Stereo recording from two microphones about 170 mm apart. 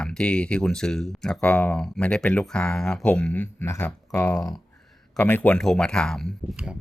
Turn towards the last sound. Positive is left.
turn(degrees=0)  # may be behind; listen again after turning